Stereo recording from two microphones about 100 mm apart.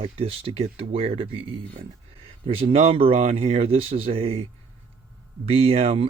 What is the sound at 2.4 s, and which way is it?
Speech, 80° right.